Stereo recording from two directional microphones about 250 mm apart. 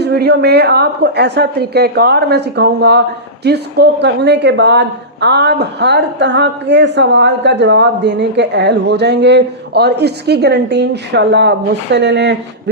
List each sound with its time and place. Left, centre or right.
0.0 s a woman's voice: right